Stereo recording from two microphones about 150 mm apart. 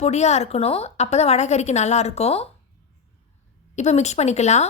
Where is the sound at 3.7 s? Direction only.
50° left (ahead or behind).